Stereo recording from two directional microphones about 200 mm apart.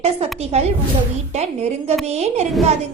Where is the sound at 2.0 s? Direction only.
30° right (ahead or behind).